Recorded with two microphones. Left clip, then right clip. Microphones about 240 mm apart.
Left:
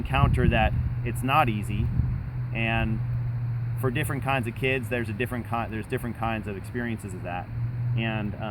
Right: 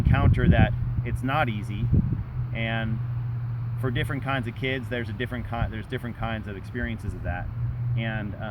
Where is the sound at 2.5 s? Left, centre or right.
Left.